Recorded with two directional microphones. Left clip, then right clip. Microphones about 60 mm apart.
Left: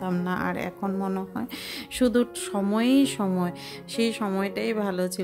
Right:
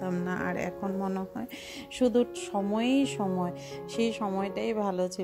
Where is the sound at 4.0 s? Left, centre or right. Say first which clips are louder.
Left 3 dB; right.